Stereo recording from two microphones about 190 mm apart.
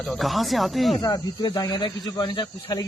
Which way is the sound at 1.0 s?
20° left (ahead or behind).